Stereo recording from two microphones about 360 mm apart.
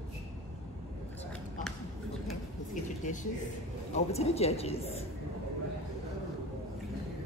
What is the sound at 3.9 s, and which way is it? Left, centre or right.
Speech, centre.